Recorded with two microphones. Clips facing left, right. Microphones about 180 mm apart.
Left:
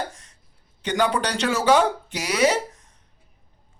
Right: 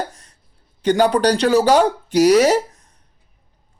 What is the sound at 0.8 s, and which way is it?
Speech, 40° right (ahead or behind).